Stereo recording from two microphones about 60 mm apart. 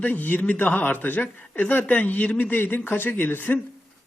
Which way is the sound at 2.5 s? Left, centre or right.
Left.